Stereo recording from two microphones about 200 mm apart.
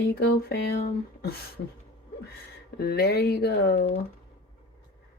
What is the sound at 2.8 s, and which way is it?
Speech, 50° left (ahead or behind).